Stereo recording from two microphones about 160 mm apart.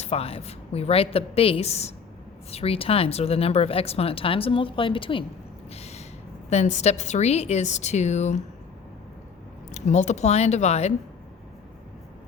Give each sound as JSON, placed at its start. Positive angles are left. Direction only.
{"t": 0.0, "sound": "speech", "side_deg": 40}
{"t": 5.7, "sound": "owl", "side_deg": 40}
{"t": 6.5, "sound": "a woman's voice", "side_deg": 45}
{"t": 9.7, "sound": "a woman's voice", "side_deg": 45}